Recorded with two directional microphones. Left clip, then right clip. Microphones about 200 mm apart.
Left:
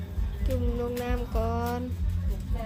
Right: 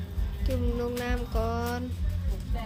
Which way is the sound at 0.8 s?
Centre (ahead or behind).